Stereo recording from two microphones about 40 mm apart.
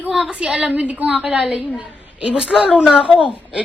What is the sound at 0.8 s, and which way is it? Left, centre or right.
Speech, right.